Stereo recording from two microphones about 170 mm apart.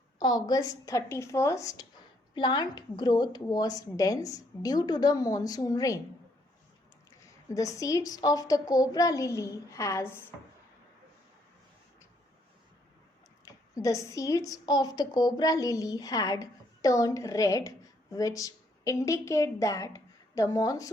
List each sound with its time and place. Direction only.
0.2 s a woman's voice: 25° left (ahead or behind)
7.5 s a woman's voice: 20° left (ahead or behind)
13.4 s a woman's voice: 20° left (ahead or behind)